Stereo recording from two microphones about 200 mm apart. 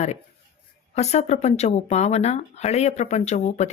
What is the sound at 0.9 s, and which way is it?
A woman's voice, 35° left (ahead or behind).